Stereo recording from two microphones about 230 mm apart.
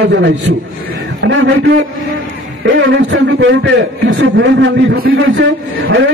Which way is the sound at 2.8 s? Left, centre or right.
Right.